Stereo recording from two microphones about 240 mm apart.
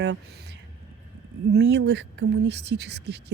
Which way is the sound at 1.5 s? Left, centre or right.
Right.